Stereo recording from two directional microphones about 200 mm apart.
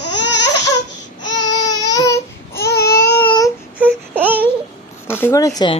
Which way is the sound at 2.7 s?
50° left (ahead or behind).